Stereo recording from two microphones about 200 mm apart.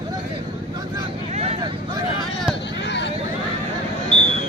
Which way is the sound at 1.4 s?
30° right (ahead or behind).